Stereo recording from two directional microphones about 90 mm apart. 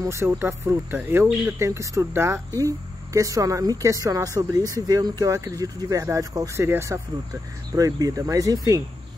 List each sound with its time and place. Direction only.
0.0 s speech: 30° right (ahead or behind)
6.5 s speech: 30° right (ahead or behind)
7.7 s speech: 40° right (ahead or behind)